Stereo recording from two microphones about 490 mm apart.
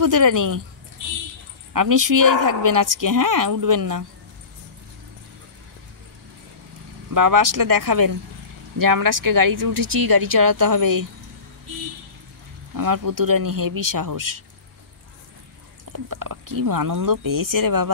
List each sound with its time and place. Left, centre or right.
0.0 s speech: right
1.7 s speech: right
7.2 s speech: right
12.7 s speech: right
15.9 s speech: right